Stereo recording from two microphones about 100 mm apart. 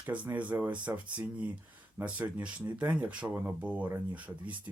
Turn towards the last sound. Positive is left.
turn(degrees=-15)  # may be behind; listen again after turning